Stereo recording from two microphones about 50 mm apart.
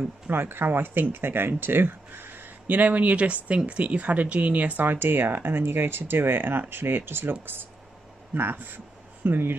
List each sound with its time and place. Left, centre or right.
0.3 s speech: right
2.7 s speech: right
4.8 s speech: right
8.4 s speech: right